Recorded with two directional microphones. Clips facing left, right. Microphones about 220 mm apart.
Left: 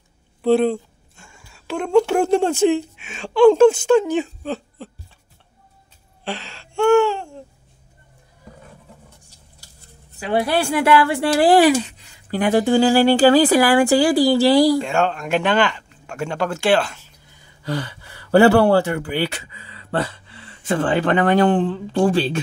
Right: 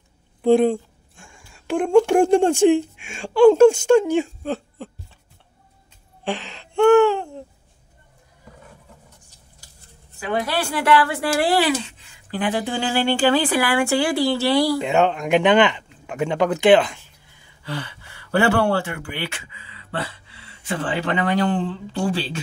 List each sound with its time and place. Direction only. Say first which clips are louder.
0.4 s a sound: right 1 dB; 15° right (ahead or behind)
2.0 s speech: right 1 dB; 10° right (ahead or behind)
6.2 s gasp: right 3 dB; 15° right (ahead or behind)
6.9 s a sound: right 1 dB; 15° right (ahead or behind)
10.3 s a woman's voice: left 5 dB; 25° left (ahead or behind)
12.0 s speech: left 4 dB; 40° left (ahead or behind)
14.8 s speech: right 1 dB; 15° right (ahead or behind)
17.6 s a sound: left 5 dB; 40° left (ahead or behind)
20.6 s speech: left 6 dB; 50° left (ahead or behind)